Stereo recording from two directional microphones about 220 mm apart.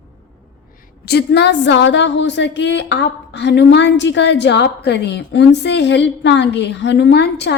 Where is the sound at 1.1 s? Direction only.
50° left (ahead or behind).